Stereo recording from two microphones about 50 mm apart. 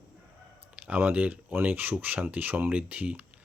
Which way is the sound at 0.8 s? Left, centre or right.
Right.